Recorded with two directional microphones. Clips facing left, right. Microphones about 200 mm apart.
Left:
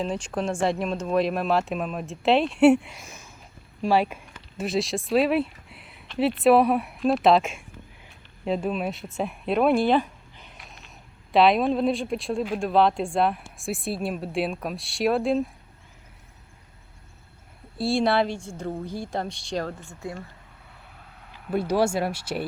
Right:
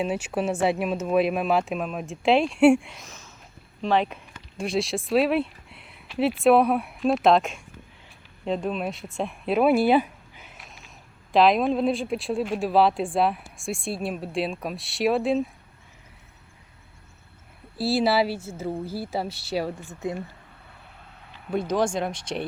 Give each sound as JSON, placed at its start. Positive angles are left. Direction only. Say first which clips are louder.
{"t": 0.0, "sound": "speech", "louder": "right 2 dB", "side_deg": -5}
{"t": 17.7, "sound": "speech", "louder": "even", "side_deg": 0}
{"t": 21.3, "sound": "speech", "louder": "left 1 dB", "side_deg": 5}